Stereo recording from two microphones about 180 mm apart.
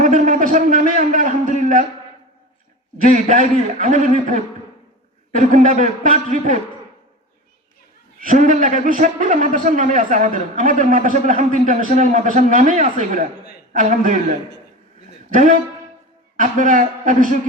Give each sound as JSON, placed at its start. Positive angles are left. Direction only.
{"t": 0.0, "sound": "a man's voice", "side_deg": -45}
{"t": 3.1, "sound": "a man's voice", "side_deg": -45}
{"t": 8.2, "sound": "a man's voice", "side_deg": -45}
{"t": 16.4, "sound": "a man's voice", "side_deg": -45}